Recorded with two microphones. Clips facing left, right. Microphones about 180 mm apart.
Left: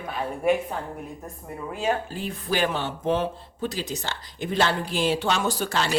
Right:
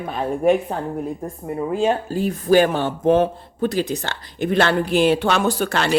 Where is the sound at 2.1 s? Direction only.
45° right (ahead or behind).